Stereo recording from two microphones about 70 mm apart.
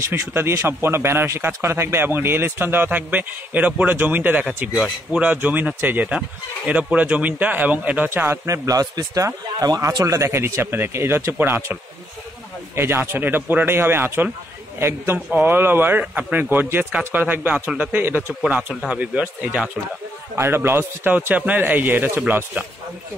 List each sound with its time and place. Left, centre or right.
0.0 s speech: right
8.5 s speech: right
10.0 s speech: right
18.9 s speech: centre
20.3 s speech: right